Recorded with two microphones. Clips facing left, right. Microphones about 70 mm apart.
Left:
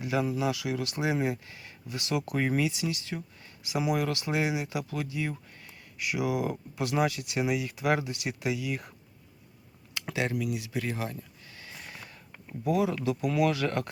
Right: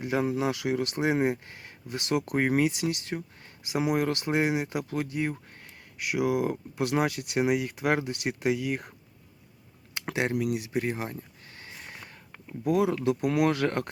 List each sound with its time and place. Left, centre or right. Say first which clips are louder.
0.0 s speech: right 2 dB; right
9.9 s a sound: right 2 dB; right
12.6 s speech: right 3 dB; right